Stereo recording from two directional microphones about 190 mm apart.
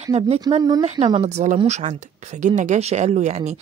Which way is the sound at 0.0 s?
30° right (ahead or behind).